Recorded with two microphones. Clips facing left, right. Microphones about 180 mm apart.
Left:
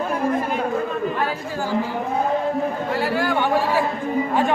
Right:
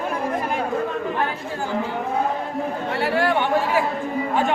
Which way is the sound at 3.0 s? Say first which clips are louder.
Right 2 dB; 25° right (ahead or behind).